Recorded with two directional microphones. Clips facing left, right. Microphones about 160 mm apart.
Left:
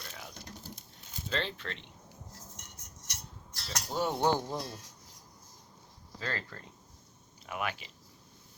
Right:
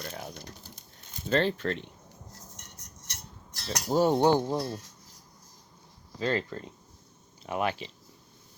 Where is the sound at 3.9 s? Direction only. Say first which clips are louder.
Right 9 dB; 35° right (ahead or behind).